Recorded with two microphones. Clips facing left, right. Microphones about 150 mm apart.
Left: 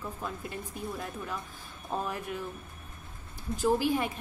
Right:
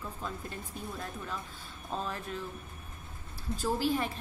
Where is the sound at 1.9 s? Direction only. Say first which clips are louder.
Left 3 dB; 15° left (ahead or behind).